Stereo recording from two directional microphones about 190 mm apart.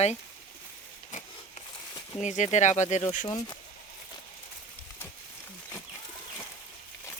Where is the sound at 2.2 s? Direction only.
40° left (ahead or behind).